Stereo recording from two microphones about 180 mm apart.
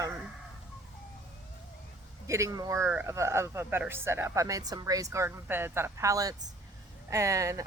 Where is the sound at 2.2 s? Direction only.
15° right (ahead or behind).